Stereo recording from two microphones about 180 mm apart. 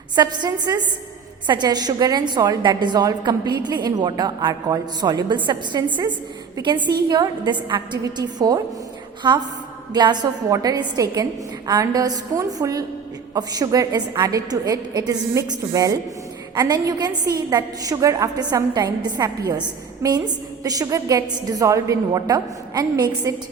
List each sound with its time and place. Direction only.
0.2 s a woman's voice: 25° right (ahead or behind)